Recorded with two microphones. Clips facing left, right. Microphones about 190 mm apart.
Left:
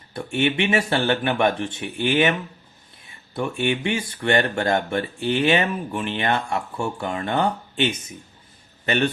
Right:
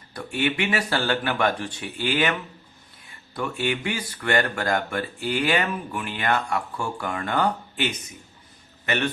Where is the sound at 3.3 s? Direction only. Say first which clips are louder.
Left 3 dB; 25° left (ahead or behind).